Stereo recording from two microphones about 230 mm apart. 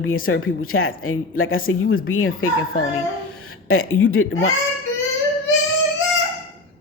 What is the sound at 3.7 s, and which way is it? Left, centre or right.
Speech, left.